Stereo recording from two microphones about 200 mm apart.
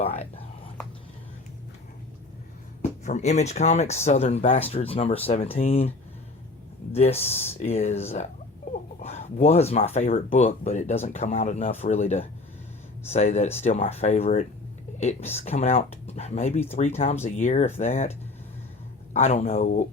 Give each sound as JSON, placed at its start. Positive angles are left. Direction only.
{"t": 0.0, "sound": "speech", "side_deg": 30}
{"t": 3.0, "sound": "speech", "side_deg": 35}
{"t": 6.9, "sound": "speech", "side_deg": 30}
{"t": 19.1, "sound": "speech", "side_deg": 35}